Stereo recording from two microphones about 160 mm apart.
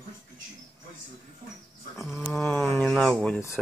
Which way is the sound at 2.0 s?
Centre (ahead or behind).